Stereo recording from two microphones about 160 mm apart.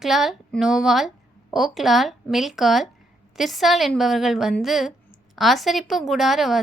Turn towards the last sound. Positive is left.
turn(degrees=0)  # may be behind; listen again after turning